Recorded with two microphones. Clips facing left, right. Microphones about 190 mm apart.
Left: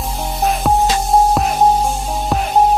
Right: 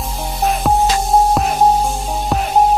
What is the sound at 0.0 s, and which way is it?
Music, centre (ahead or behind).